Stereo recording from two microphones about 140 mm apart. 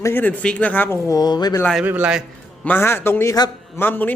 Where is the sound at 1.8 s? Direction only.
10° right (ahead or behind).